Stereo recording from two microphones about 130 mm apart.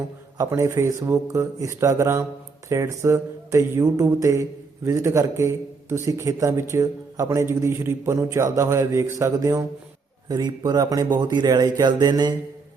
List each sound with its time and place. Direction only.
0.3 s speech: 20° right (ahead or behind)